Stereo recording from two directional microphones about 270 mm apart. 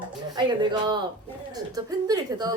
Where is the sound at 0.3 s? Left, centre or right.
Centre.